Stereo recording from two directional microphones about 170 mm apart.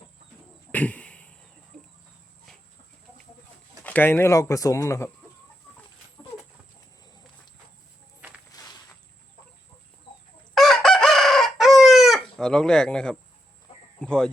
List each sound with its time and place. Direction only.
0.7 s a sound: 10° left (ahead or behind)
3.8 s speech: 10° left (ahead or behind)
10.5 s chicken: centre (ahead or behind)
14.0 s speech: 5° left (ahead or behind)